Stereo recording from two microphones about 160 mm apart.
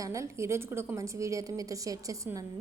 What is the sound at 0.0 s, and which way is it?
A woman's voice, 20° right (ahead or behind).